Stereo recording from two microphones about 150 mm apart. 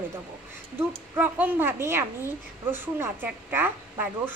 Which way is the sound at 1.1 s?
10° right (ahead or behind).